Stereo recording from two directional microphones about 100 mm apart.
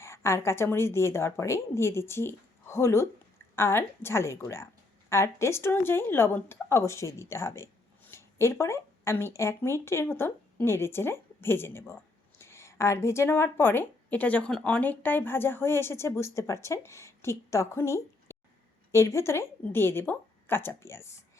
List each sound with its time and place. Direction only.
0.0 s a woman's voice: 25° left (ahead or behind)